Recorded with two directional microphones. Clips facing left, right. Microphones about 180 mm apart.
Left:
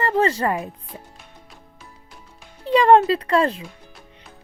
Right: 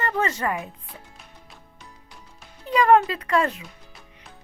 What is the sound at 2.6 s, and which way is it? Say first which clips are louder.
Speech: left 4 dB; 30° left (ahead or behind).